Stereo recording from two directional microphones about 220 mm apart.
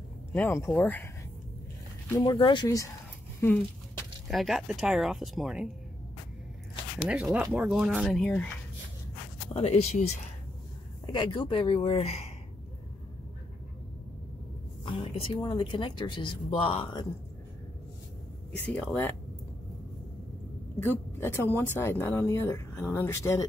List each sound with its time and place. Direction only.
0.3 s speech: 10° left (ahead or behind)
2.0 s speech: 15° left (ahead or behind)
3.3 s a sound: 10° left (ahead or behind)
4.3 s speech: centre (ahead or behind)
7.1 s speech: 5° right (ahead or behind)
9.5 s a woman's voice: 25° left (ahead or behind)
14.9 s a woman's voice: 25° left (ahead or behind)
18.8 s speech: 10° left (ahead or behind)
20.8 s speech: 10° left (ahead or behind)